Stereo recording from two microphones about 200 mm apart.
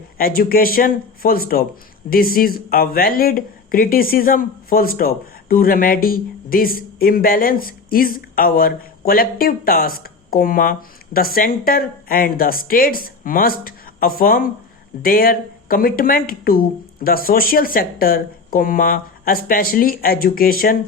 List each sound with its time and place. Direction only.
0.2 s speech: 50° left (ahead or behind)